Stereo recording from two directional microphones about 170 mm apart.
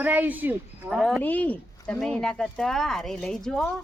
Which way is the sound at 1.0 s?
Centre (ahead or behind).